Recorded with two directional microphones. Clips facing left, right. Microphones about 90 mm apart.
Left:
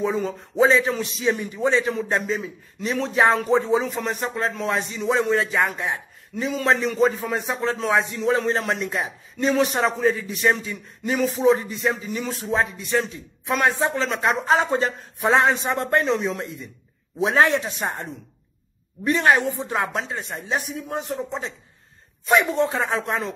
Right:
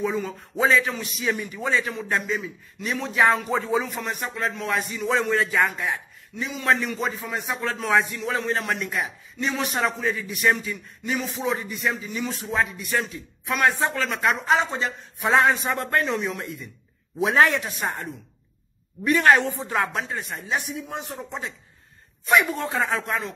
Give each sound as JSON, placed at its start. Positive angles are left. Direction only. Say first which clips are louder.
{"t": 0.0, "sound": "speech", "louder": "left 3 dB", "side_deg": 25}
{"t": 6.3, "sound": "a man's voice", "louder": "left 6 dB", "side_deg": 45}
{"t": 6.6, "sound": "speech", "louder": "left 4 dB", "side_deg": 30}
{"t": 19.2, "sound": "speech", "louder": "right 1 dB", "side_deg": 15}